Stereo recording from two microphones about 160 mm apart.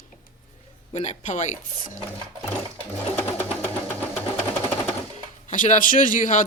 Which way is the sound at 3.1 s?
15° left (ahead or behind).